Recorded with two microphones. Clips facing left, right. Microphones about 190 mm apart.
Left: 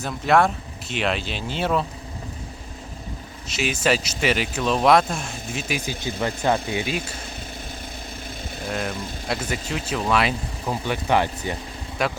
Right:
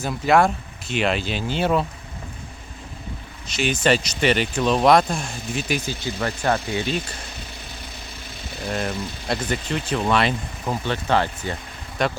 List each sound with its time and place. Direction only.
0.0 s speech: centre (ahead or behind)
3.5 s speech: 5° left (ahead or behind)
5.8 s speech: 15° left (ahead or behind)
8.6 s speech: centre (ahead or behind)